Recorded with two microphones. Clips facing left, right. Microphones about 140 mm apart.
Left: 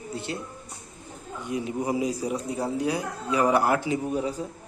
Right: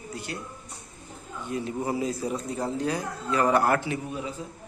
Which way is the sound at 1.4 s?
15° left (ahead or behind).